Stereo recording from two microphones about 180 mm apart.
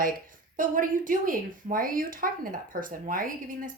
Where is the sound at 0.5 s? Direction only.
50° right (ahead or behind).